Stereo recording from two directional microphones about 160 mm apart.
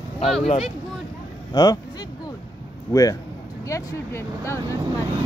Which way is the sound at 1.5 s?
25° left (ahead or behind).